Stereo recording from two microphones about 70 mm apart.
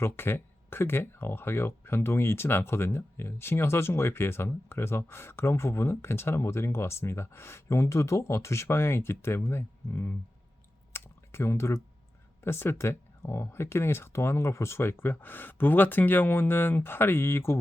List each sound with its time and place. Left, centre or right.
0.0 s speech: left
10.9 s a sound: left
12.4 s speech: left